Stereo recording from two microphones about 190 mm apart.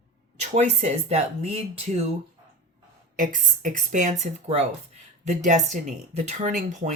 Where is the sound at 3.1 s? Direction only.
45° right (ahead or behind).